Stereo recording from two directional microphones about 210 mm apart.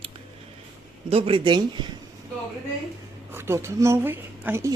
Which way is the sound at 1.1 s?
25° right (ahead or behind).